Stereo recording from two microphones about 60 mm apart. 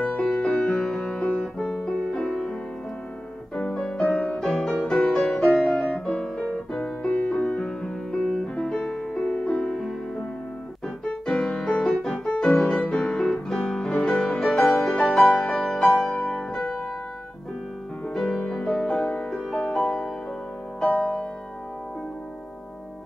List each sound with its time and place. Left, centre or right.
0.0 s music: left
3.7 s music: centre
4.1 s music: left
4.4 s music: centre
7.0 s music: left
9.8 s music: centre
11.1 s piano: centre
12.5 s music: centre
16.1 s music: centre
18.0 s music: centre